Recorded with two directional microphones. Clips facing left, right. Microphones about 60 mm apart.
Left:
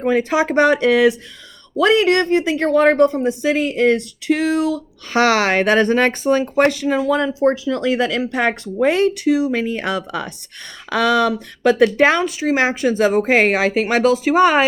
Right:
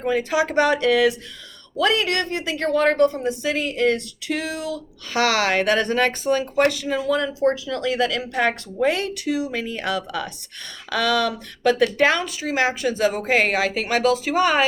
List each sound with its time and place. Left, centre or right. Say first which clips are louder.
0.0 s speech: left 4 dB; left